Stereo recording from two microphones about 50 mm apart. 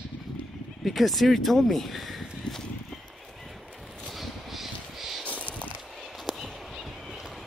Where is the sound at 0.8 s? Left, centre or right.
Centre.